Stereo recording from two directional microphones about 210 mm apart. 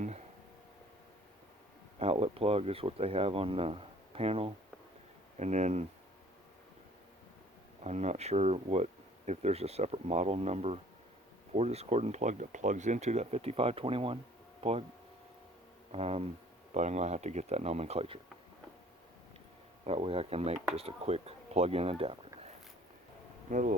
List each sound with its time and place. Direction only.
2.0 s speech: 30° right (ahead or behind)
7.9 s speech: 30° right (ahead or behind)
15.9 s speech: 30° right (ahead or behind)
19.8 s speech: 30° right (ahead or behind)
23.5 s speech: 35° right (ahead or behind)